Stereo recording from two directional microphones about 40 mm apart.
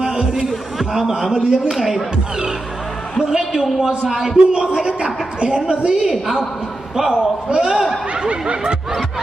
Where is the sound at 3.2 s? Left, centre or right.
Centre.